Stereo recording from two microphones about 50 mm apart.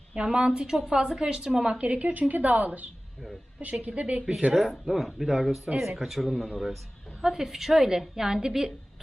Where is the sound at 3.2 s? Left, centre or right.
Centre.